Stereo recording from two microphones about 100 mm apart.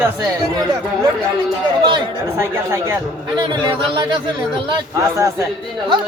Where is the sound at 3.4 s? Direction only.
50° right (ahead or behind).